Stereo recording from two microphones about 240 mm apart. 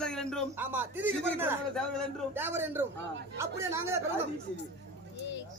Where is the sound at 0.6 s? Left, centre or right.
Centre.